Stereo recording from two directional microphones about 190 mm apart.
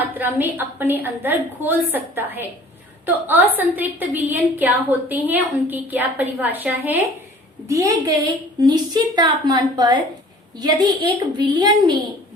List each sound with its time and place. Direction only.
0.1 s a woman's voice: 10° right (ahead or behind)